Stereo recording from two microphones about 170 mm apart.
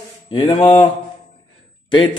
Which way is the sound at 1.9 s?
30° left (ahead or behind).